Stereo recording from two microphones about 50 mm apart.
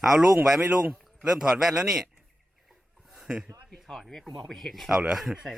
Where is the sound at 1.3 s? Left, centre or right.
Centre.